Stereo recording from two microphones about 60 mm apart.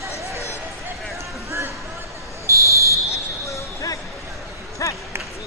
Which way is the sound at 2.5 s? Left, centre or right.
Right.